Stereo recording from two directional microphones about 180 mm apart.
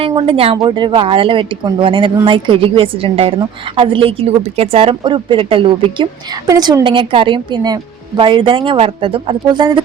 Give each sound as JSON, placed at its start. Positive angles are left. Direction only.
{"t": 0.2, "sound": "a woman's voice", "side_deg": -30}